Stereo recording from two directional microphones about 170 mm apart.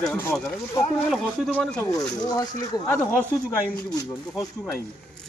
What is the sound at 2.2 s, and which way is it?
Speech, 20° left (ahead or behind).